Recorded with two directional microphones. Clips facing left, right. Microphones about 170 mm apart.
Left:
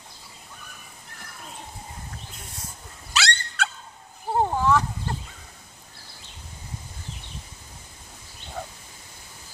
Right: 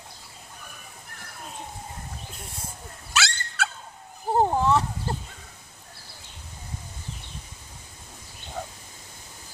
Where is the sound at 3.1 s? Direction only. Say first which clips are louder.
Left 1 dB; centre (ahead or behind).